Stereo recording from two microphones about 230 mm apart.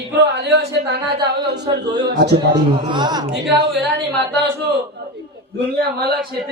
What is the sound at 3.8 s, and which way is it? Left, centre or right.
Speech, right.